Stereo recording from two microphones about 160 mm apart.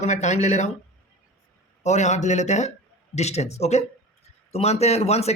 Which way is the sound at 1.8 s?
45° left (ahead or behind).